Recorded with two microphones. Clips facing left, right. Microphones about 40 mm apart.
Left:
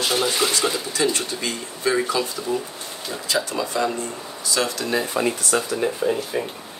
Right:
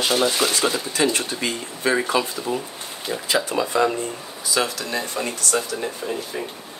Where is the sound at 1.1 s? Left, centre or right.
Right.